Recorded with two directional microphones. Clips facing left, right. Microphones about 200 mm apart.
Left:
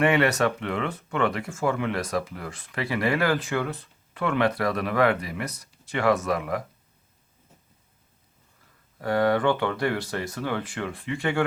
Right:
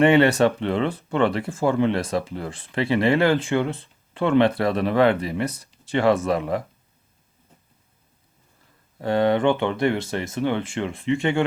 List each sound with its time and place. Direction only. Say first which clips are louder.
0.0 s speech: right 5 dB; 30° right (ahead or behind)
9.0 s speech: right 3 dB; 25° right (ahead or behind)